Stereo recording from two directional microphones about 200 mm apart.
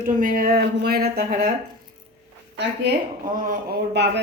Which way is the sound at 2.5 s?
55° right (ahead or behind).